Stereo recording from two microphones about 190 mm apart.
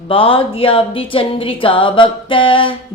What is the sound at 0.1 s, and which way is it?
Speech, 30° left (ahead or behind).